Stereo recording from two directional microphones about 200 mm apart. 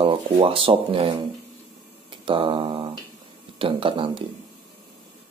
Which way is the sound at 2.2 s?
25° right (ahead or behind).